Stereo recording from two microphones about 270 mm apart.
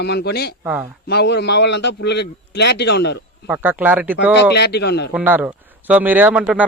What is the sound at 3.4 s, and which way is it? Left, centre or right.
Speech, centre.